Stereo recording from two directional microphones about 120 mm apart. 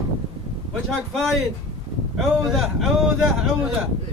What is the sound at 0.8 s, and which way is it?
Speech, centre (ahead or behind).